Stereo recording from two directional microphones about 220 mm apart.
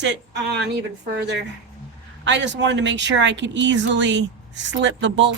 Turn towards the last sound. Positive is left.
turn(degrees=-55)  # may be behind; listen again after turning